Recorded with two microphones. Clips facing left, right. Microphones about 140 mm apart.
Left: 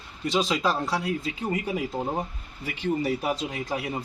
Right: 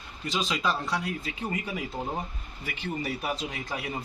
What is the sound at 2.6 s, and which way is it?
Speech, 30° left (ahead or behind).